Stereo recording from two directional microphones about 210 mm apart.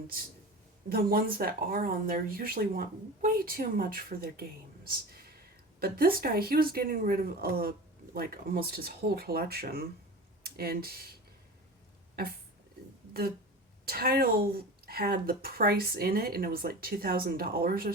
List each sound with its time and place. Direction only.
0.9 s speech: 45° right (ahead or behind)
13.8 s speech: 45° right (ahead or behind)